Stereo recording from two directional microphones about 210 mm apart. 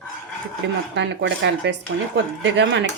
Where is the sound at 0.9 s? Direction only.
55° right (ahead or behind).